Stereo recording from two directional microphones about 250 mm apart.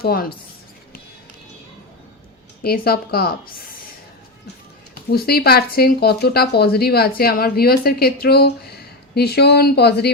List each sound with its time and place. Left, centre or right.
0.0 s speech: left
2.6 s speech: left
5.1 s speech: left